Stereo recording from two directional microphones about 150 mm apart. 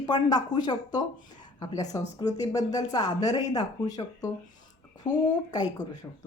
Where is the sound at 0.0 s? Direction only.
25° left (ahead or behind).